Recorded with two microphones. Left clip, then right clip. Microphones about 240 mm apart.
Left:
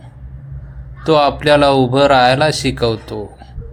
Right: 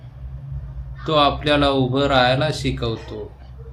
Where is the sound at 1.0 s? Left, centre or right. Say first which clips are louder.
Left 5 dB; left.